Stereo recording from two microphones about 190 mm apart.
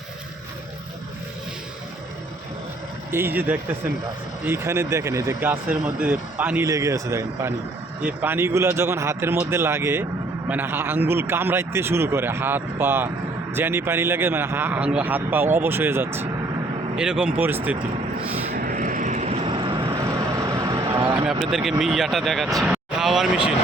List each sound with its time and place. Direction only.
3.1 s speech: 10° right (ahead or behind)
18.5 s vehicle: 45° right (ahead or behind); by 19.9 s 25° right (ahead or behind)
19.9 s vehicle: 15° right (ahead or behind)
21.5 s speech: 5° right (ahead or behind)